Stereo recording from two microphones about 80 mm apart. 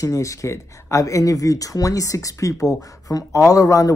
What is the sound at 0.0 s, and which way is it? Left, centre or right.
Speech, left.